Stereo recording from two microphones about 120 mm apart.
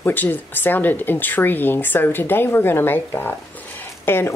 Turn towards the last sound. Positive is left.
turn(degrees=20)  # may be behind; listen again after turning